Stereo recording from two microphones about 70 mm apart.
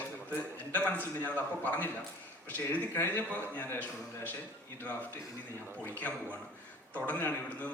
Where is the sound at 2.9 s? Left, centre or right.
Left.